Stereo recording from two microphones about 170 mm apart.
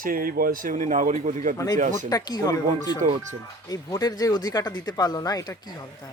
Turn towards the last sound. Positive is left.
turn(degrees=20)  # may be behind; listen again after turning